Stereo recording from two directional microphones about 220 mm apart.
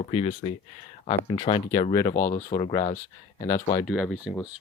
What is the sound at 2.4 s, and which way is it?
Speech, 20° left (ahead or behind).